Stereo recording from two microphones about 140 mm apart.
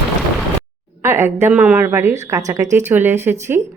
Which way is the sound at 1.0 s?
20° right (ahead or behind).